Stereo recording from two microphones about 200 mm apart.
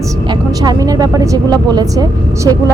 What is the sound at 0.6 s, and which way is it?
A woman's voice, 20° right (ahead or behind).